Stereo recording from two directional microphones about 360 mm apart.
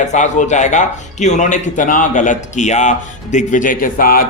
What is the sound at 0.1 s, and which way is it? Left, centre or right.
Speech, centre.